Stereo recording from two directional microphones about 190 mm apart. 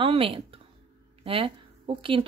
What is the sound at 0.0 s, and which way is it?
A woman's voice, 30° right (ahead or behind).